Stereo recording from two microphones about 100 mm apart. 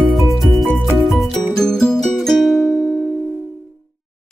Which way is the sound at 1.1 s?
5° left (ahead or behind).